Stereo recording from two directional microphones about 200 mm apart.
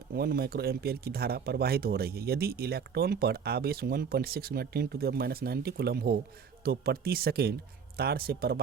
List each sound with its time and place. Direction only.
0.1 s speech: 50° right (ahead or behind)